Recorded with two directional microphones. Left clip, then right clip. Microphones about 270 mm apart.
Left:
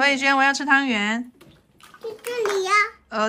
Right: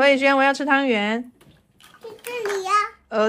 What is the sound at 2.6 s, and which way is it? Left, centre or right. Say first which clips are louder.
Speech: left 1 dB; centre.